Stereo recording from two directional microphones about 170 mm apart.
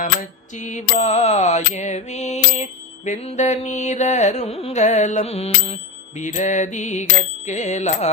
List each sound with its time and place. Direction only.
0.5 s mantra: 45° left (ahead or behind)